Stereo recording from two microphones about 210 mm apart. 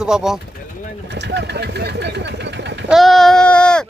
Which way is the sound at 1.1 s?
55° right (ahead or behind).